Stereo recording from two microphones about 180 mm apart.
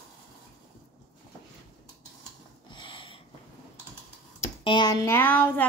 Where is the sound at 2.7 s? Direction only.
25° left (ahead or behind).